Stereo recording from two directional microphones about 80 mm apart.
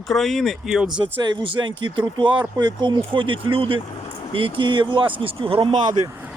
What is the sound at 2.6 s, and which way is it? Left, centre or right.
Speech, right.